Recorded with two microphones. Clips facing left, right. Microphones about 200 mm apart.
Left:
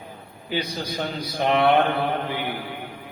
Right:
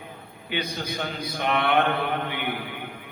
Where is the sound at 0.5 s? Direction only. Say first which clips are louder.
Left 2 dB; 35° left (ahead or behind).